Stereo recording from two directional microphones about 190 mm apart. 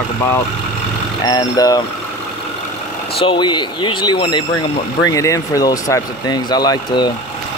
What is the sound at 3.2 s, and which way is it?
Speech, 25° left (ahead or behind).